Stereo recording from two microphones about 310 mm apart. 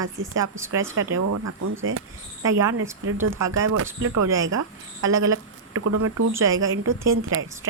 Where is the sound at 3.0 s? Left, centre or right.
Right.